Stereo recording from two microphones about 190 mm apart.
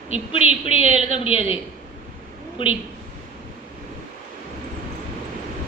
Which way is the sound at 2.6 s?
25° left (ahead or behind).